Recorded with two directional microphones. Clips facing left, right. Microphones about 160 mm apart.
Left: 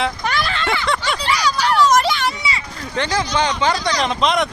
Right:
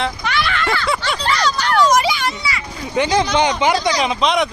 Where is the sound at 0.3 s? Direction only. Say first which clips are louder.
Right 1 dB; 40° left (ahead or behind).